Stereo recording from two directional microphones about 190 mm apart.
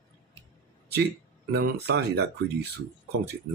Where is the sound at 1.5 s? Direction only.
60° right (ahead or behind).